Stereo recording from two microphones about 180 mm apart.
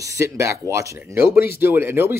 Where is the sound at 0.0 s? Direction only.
20° right (ahead or behind).